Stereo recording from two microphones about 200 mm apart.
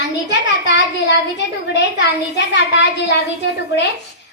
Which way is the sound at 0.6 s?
60° left (ahead or behind).